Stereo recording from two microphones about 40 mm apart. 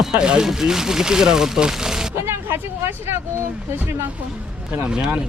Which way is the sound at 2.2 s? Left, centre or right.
Right.